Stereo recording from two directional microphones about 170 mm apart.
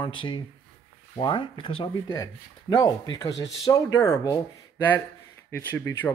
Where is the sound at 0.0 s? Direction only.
30° left (ahead or behind).